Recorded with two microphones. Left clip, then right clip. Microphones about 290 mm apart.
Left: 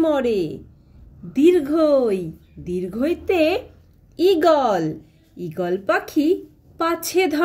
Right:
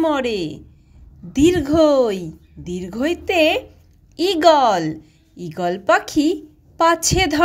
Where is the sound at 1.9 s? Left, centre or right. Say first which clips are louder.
Right 2 dB; right.